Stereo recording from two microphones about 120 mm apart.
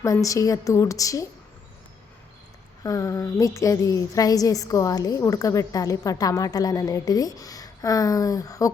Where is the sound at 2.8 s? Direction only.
25° left (ahead or behind).